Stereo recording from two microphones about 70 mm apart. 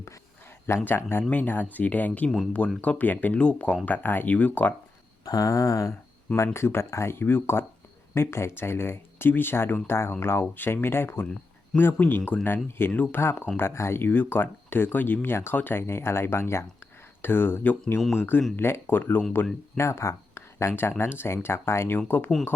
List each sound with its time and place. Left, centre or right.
0.9 s speech: left
5.2 s a sound: left
6.3 s speech: left
12.9 s speech: left
13.1 s speech: left
19.7 s speech: left